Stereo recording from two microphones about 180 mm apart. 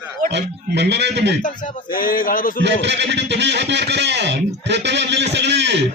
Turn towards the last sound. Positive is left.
turn(degrees=-70)  # may be behind; listen again after turning